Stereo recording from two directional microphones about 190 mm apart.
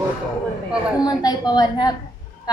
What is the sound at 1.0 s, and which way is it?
Speech, 20° left (ahead or behind).